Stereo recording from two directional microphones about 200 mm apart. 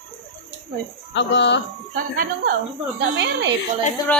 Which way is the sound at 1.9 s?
45° right (ahead or behind).